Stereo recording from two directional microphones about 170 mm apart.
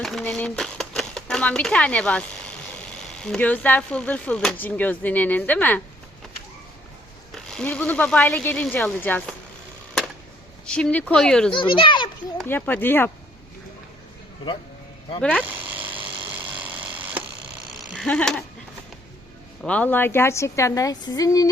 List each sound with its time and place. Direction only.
0.0 s speech: centre (ahead or behind)
3.2 s speech: 5° left (ahead or behind)
7.5 s speech: 10° left (ahead or behind)
10.7 s speech: 5° left (ahead or behind)
11.5 s a child's voice: 30° left (ahead or behind)
12.4 s speech: 10° left (ahead or behind)
15.2 s speech: 5° left (ahead or behind)
17.7 s a sound: centre (ahead or behind)
19.6 s speech: 10° left (ahead or behind)